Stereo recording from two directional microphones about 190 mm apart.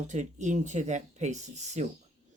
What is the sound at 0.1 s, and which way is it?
Speech, 40° right (ahead or behind).